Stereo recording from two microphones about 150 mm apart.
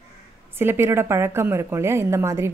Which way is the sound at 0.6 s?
15° right (ahead or behind).